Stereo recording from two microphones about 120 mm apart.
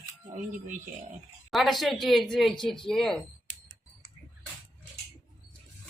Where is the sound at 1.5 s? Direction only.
Centre (ahead or behind).